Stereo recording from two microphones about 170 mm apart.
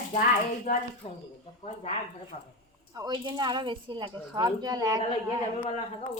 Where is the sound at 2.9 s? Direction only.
25° right (ahead or behind).